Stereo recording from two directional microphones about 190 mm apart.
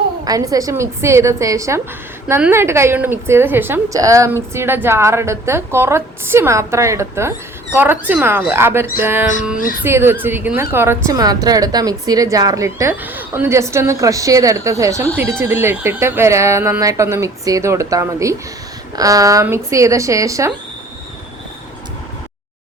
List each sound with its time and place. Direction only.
0.3 s a woman's voice: 20° right (ahead or behind)